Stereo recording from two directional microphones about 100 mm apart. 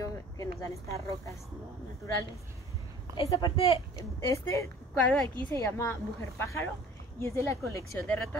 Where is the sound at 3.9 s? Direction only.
30° left (ahead or behind).